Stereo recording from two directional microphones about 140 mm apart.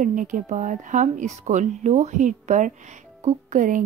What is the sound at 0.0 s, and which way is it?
Speech, 70° right (ahead or behind).